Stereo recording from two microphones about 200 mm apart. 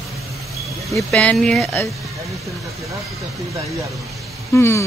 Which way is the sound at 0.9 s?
5° left (ahead or behind).